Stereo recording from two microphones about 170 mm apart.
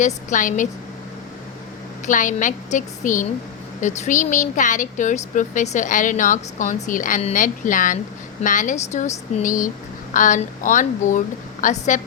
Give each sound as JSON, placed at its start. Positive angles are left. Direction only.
{"t": 0.0, "sound": "speech", "side_deg": 50}
{"t": 2.0, "sound": "speech", "side_deg": 50}